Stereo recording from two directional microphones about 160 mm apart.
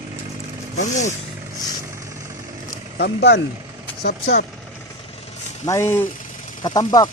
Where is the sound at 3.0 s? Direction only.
90° left.